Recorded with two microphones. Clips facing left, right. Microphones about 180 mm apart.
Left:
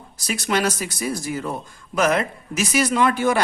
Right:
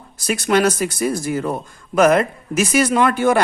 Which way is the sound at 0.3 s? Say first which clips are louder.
Right 6 dB; 55° right (ahead or behind).